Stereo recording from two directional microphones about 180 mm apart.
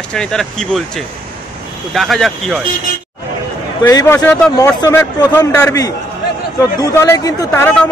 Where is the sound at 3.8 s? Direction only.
15° left (ahead or behind).